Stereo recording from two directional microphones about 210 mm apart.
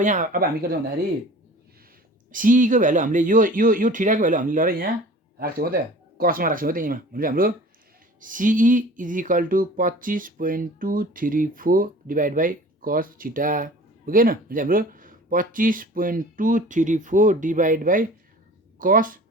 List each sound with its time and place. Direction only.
0.0 s speech: 35° right (ahead or behind)
2.3 s speech: 40° right (ahead or behind)